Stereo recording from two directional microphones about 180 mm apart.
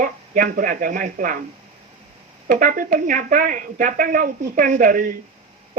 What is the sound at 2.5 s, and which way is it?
Speech, 50° right (ahead or behind).